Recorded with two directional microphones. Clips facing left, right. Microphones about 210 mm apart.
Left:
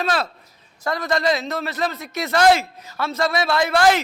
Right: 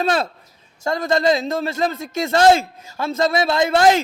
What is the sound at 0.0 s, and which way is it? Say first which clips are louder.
A man's voice: right 3 dB; 30° right (ahead or behind).